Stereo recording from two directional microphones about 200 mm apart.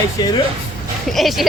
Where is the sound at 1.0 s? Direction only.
Centre (ahead or behind).